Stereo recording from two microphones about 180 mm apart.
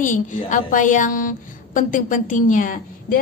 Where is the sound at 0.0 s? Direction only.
45° left (ahead or behind).